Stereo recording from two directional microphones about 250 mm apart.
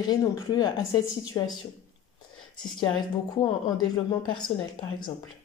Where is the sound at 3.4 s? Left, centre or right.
Centre.